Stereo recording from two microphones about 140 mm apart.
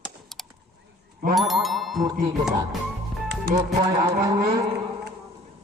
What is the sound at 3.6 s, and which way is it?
Speech, 25° right (ahead or behind).